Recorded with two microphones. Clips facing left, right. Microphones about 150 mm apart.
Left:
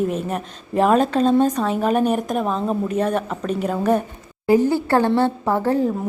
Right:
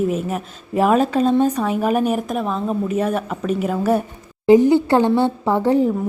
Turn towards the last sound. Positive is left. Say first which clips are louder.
# right 3 dB
turn(degrees=-15)  # may be behind; listen again after turning